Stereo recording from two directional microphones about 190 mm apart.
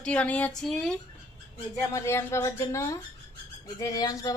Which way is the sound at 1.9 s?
15° left (ahead or behind).